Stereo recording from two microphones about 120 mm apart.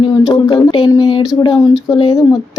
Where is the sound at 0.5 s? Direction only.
45° left (ahead or behind).